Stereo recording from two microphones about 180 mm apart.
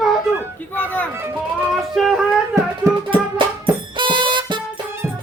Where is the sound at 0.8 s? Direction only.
10° left (ahead or behind).